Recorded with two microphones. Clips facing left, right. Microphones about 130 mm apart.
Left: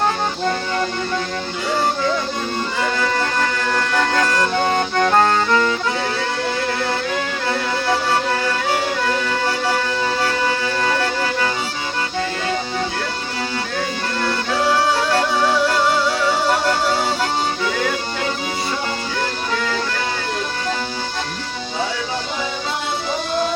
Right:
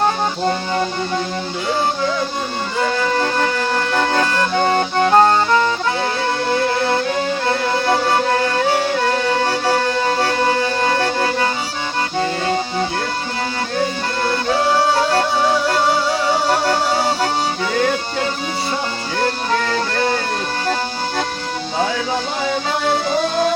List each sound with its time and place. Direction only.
0.0 s music: 25° right (ahead or behind)
3.2 s music: 30° right (ahead or behind)
8.4 s music: 35° right (ahead or behind)
14.3 s music: 30° right (ahead or behind)
19.2 s music: 45° right (ahead or behind)